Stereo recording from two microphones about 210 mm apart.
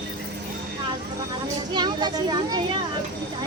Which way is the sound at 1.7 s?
20° right (ahead or behind).